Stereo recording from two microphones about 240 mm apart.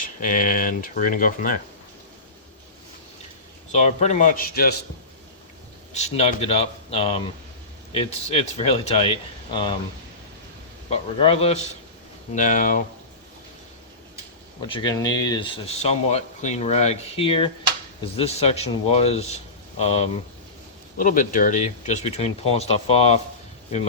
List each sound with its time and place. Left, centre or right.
0.0 s speech: left
3.7 s speech: left
5.9 s speech: left
10.8 s speech: left
14.6 s speech: centre